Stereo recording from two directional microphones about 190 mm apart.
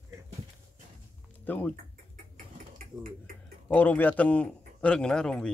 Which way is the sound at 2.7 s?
45° right (ahead or behind).